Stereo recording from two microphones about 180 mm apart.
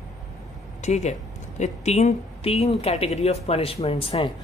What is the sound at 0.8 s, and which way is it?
Speech, 40° left (ahead or behind).